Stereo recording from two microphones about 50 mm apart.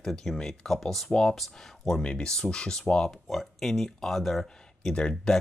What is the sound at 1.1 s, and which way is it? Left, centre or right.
Speech, centre.